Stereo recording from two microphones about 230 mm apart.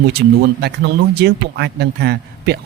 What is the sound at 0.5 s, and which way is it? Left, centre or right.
Speech, right.